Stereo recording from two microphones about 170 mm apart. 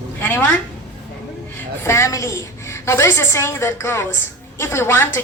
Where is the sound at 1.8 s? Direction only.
15° left (ahead or behind).